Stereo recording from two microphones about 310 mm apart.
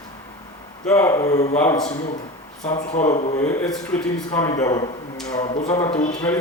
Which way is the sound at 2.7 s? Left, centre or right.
Left.